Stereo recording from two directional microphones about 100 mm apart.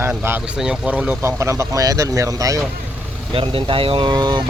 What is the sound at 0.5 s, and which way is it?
Speech, 10° right (ahead or behind).